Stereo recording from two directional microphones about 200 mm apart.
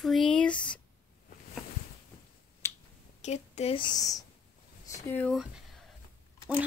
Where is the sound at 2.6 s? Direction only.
15° left (ahead or behind).